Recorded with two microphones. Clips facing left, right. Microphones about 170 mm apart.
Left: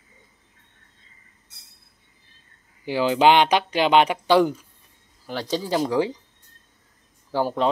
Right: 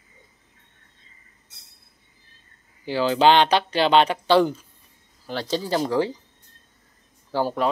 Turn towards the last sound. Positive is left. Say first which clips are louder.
# left 1 dB
turn(degrees=15)  # may be behind; listen again after turning